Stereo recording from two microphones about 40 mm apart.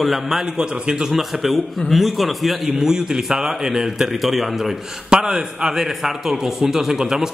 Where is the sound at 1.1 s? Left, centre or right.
Centre.